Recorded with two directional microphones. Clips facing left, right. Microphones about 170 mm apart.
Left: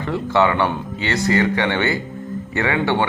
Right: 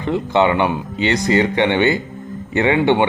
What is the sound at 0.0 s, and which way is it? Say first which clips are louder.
Speech: right 2 dB; 20° right (ahead or behind).